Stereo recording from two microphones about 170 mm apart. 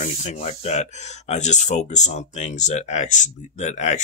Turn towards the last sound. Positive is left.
turn(degrees=45)  # may be behind; listen again after turning